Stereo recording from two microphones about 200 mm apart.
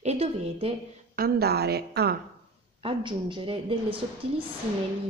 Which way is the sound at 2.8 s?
25° right (ahead or behind).